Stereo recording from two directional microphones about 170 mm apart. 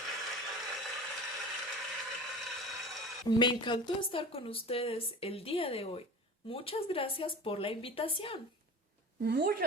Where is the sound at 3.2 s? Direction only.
25° left (ahead or behind).